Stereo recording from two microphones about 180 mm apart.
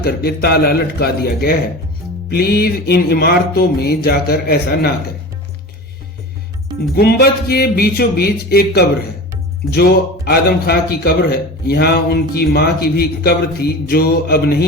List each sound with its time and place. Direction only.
0.0 s a man's voice: 60° left (ahead or behind)
6.9 s a man's voice: 60° left (ahead or behind)